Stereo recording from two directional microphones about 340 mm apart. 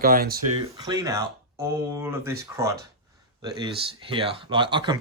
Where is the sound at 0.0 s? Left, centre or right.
Right.